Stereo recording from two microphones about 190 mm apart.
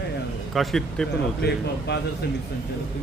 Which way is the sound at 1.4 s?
60° left (ahead or behind).